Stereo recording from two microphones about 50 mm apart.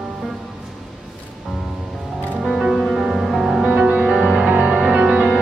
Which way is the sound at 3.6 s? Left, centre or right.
Right.